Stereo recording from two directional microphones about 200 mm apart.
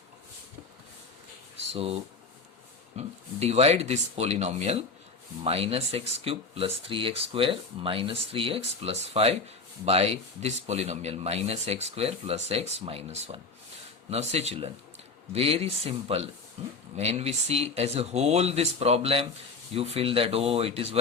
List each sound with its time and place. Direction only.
1.7 s speech: 30° right (ahead or behind)
3.4 s speech: 30° right (ahead or behind)